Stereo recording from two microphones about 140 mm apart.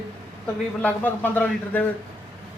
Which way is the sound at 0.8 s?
10° left (ahead or behind).